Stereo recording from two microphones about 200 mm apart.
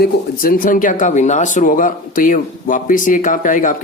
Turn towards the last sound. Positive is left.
turn(degrees=40)  # may be behind; listen again after turning